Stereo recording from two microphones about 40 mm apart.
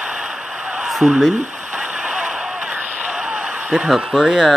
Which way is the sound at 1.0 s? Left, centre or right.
Right.